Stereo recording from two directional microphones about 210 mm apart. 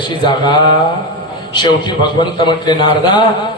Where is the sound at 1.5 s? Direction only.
20° left (ahead or behind).